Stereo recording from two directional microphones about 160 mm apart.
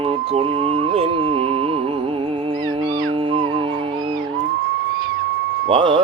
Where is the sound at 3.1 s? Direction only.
35° right (ahead or behind).